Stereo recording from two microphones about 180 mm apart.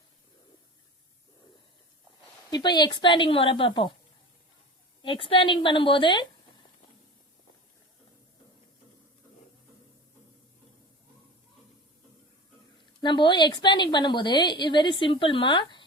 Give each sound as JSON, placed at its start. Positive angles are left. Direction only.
{"t": 2.5, "sound": "a woman's voice", "side_deg": 25}
{"t": 5.0, "sound": "a woman's voice", "side_deg": 30}
{"t": 13.0, "sound": "a woman's voice", "side_deg": 25}